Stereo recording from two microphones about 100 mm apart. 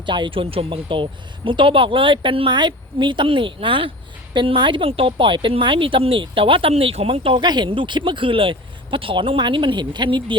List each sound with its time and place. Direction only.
0.0 s speech: 50° right (ahead or behind)
7.4 s speech: 45° right (ahead or behind)